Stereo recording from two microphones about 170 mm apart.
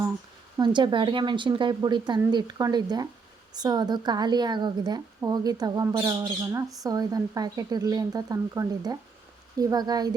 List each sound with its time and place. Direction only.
0.6 s a woman's voice: 25° right (ahead or behind)